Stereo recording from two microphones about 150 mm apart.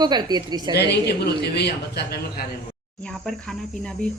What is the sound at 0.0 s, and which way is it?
Speech, 30° right (ahead or behind).